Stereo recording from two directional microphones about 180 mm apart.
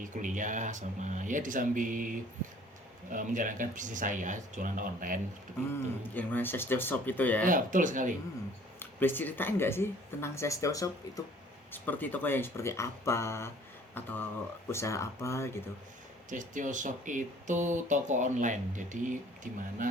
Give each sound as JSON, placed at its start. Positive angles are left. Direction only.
{"t": 0.0, "sound": "speech", "side_deg": -45}
{"t": 6.1, "sound": "speech", "side_deg": 10}
{"t": 7.4, "sound": "speech", "side_deg": -45}
{"t": 8.8, "sound": "speech", "side_deg": 10}
{"t": 16.3, "sound": "speech", "side_deg": -45}